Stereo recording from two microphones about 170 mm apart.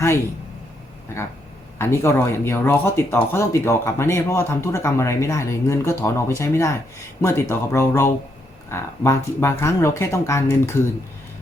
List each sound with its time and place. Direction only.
1.8 s speech: 15° left (ahead or behind)